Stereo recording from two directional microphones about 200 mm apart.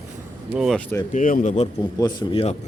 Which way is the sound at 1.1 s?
40° left (ahead or behind).